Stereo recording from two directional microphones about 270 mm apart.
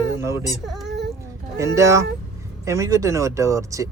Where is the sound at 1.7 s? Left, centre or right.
Centre.